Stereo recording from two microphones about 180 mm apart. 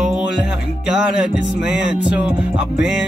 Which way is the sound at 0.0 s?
5° right (ahead or behind).